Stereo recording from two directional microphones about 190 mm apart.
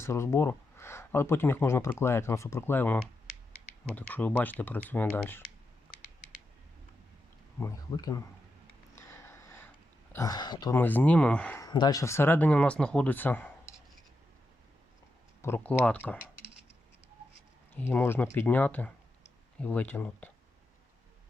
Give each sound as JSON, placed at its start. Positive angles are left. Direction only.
{"t": 0.0, "sound": "speech", "side_deg": 15}
{"t": 7.6, "sound": "speech", "side_deg": 20}
{"t": 9.0, "sound": "a sound", "side_deg": 15}
{"t": 10.8, "sound": "speech", "side_deg": 10}
{"t": 11.6, "sound": "speech", "side_deg": 20}
{"t": 15.4, "sound": "speech", "side_deg": 10}
{"t": 17.7, "sound": "speech", "side_deg": 10}